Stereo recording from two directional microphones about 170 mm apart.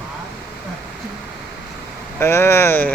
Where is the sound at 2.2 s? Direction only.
15° left (ahead or behind).